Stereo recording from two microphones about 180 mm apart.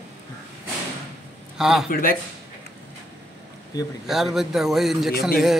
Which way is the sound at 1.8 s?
55° left (ahead or behind).